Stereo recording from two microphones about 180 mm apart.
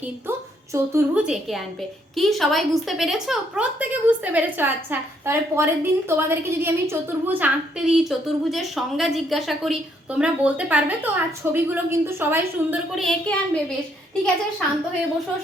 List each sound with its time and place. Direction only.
0.3 s a woman's voice: 15° right (ahead or behind); by 13.6 s 5° left (ahead or behind)